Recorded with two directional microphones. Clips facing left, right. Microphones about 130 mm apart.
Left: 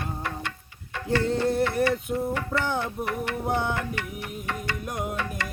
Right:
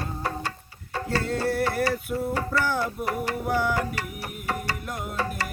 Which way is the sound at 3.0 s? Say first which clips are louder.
Right 2 dB; 35° right (ahead or behind).